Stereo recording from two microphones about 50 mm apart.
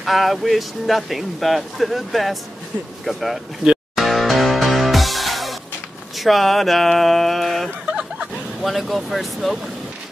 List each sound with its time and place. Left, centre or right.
0.0 s speech: centre
3.9 s music: centre
6.1 s speech: centre